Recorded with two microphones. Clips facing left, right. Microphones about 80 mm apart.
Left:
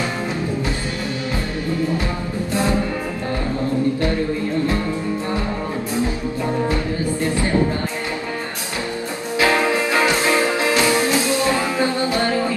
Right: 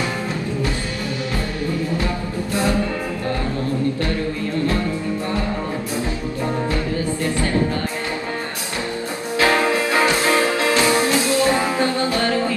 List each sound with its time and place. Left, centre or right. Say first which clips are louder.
9.4 s music: even; centre
11.4 s music: right 1 dB; right
11.8 s music: even; left